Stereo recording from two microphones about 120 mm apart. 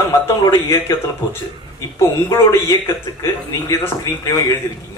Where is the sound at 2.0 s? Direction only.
25° left (ahead or behind).